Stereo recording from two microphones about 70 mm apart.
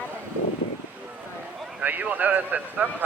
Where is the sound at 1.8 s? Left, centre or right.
Right.